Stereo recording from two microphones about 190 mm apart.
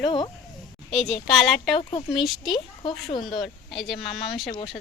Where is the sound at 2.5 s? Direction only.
25° left (ahead or behind).